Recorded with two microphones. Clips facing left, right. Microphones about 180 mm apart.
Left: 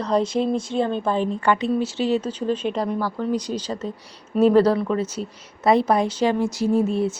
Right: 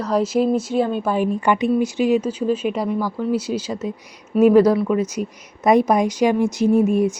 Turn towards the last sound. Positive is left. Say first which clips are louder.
# right 4 dB
turn(degrees=-15)  # may be behind; listen again after turning